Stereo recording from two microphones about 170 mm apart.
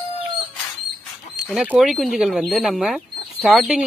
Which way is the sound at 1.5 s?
5° right (ahead or behind).